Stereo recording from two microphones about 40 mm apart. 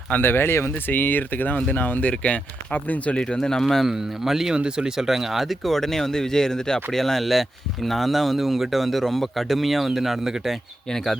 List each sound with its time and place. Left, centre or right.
0.2 s speech: left
0.9 s speech: left
2.0 s speech: left
3.3 s speech: centre
3.6 s speech: centre
3.8 s speech: centre
4.5 s speech: right
4.9 s speech: centre